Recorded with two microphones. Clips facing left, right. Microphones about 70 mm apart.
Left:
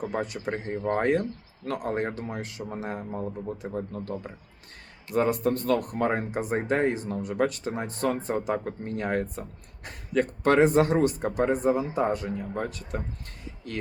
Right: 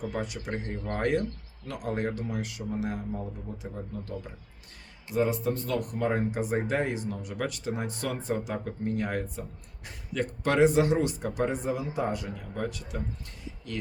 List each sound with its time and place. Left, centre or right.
0.0 s speech: left
0.6 s speech: left
1.6 s speech: left
5.1 s speech: left
8.8 s speech: left
9.0 s speech: left